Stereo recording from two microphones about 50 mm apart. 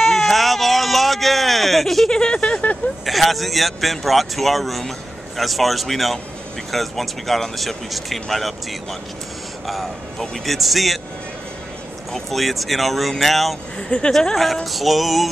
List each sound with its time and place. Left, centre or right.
0.0 s a sound: centre
3.1 s speech: centre
9.7 s speech: centre
12.1 s speech: centre
13.7 s speech: centre
14.1 s speech: centre